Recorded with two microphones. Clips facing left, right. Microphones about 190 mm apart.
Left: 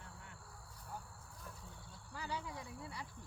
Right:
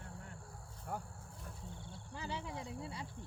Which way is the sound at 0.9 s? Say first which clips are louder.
Right 7 dB; 60° right (ahead or behind).